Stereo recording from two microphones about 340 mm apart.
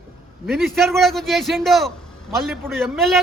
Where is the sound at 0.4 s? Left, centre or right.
Centre.